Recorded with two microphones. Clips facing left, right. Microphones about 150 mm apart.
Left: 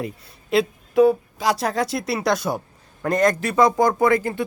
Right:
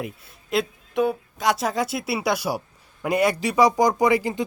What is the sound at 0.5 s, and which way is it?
Speech, centre (ahead or behind).